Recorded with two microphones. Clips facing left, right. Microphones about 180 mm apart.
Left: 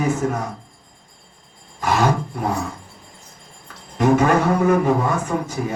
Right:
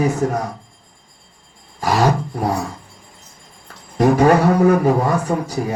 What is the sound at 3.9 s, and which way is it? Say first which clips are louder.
Speech: right 3 dB; 35° right (ahead or behind).